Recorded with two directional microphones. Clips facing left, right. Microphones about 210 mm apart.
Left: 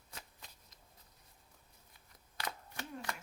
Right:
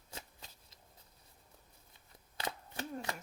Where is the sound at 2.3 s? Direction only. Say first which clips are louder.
Right 3 dB; 25° right (ahead or behind).